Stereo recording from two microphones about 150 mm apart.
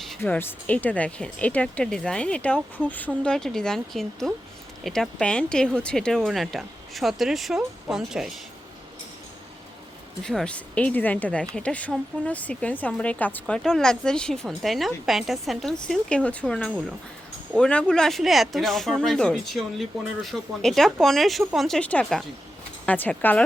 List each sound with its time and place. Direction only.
0.2 s speech: 15° left (ahead or behind); by 8.3 s 5° right (ahead or behind)
10.2 s speech: 5° left (ahead or behind)